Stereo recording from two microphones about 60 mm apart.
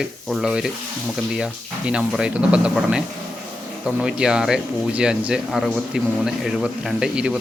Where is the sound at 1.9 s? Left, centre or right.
Centre.